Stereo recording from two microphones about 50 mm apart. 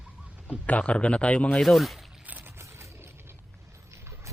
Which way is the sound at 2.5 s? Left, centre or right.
Right.